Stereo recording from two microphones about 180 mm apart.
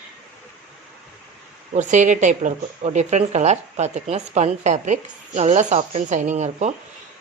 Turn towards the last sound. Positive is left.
turn(degrees=-40)  # may be behind; listen again after turning